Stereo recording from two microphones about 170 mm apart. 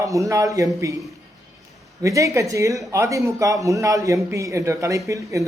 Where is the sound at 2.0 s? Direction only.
20° right (ahead or behind).